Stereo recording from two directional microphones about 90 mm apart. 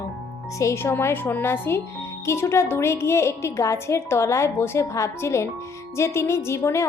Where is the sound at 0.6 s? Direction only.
30° left (ahead or behind).